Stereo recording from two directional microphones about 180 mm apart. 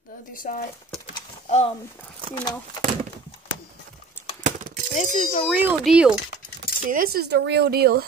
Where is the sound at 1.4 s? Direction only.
35° left (ahead or behind).